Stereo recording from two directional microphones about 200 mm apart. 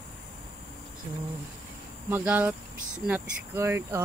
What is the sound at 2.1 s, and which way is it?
Speech, 10° right (ahead or behind).